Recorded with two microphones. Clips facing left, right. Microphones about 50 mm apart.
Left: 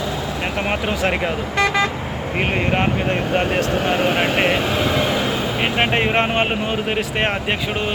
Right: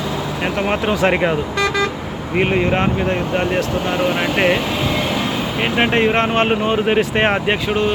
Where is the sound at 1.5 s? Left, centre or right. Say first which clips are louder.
Even; left.